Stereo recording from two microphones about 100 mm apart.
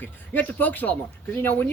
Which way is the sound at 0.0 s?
20° left (ahead or behind).